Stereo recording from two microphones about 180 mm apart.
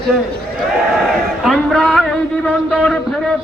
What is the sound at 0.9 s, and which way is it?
A man's voice, centre (ahead or behind).